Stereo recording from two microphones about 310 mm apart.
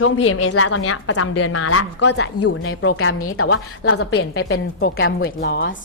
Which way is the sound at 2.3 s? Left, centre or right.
Left.